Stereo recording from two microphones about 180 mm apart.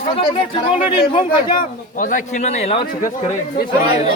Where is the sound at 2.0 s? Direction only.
45° left (ahead or behind).